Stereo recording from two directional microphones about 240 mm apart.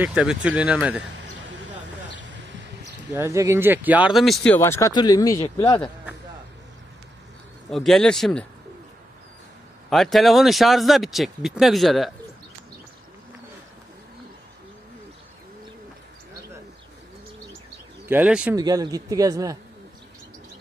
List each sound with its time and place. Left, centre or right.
0.0 s speech: centre
2.1 s a sound: right
3.2 s speech: centre
7.7 s speech: centre
9.8 s speech: centre
18.0 s speech: centre